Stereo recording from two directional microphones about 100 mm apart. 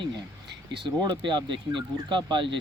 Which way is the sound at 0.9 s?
50° right (ahead or behind).